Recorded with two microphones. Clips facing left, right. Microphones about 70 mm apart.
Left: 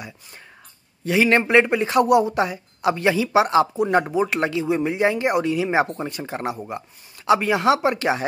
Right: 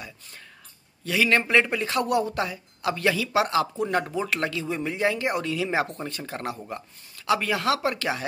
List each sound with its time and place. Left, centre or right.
1.0 s speech: left